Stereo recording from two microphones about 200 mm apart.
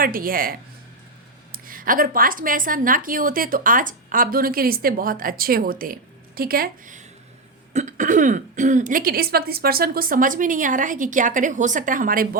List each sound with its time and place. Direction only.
0.0 s a woman's voice: 45° right (ahead or behind)
1.5 s a woman's voice: 45° right (ahead or behind)